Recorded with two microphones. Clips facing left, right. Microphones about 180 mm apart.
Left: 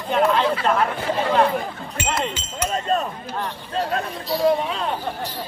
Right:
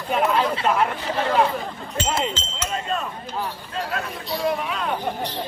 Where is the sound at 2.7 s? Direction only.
40° left (ahead or behind).